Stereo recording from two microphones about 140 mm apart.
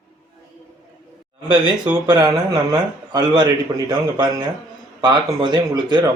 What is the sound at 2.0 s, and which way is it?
Speech, 30° right (ahead or behind).